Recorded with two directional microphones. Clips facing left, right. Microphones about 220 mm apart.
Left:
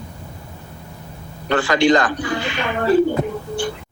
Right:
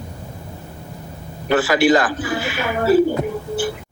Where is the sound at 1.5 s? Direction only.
5° right (ahead or behind).